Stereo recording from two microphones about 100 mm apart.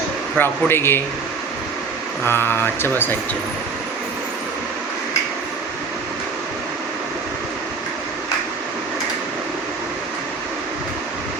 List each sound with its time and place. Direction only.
0.3 s speech: 20° left (ahead or behind)
2.2 s speech: 20° left (ahead or behind)